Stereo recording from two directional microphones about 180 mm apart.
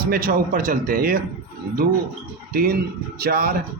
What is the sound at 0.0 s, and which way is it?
Speech, 55° right (ahead or behind).